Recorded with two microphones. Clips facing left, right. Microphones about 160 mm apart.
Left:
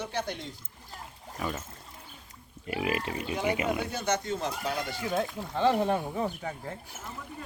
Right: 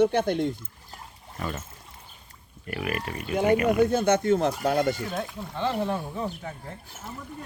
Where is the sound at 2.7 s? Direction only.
20° left (ahead or behind).